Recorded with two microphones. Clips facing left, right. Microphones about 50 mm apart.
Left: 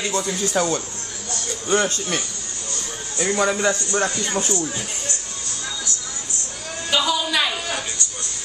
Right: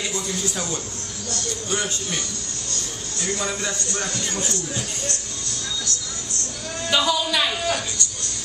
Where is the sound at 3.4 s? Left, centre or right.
Left.